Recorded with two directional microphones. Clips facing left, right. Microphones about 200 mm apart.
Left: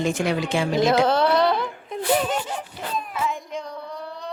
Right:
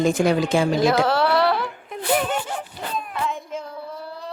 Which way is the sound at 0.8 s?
20° left (ahead or behind).